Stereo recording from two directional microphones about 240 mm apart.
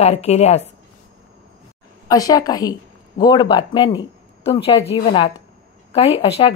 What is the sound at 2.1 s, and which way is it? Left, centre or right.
A woman's voice, centre.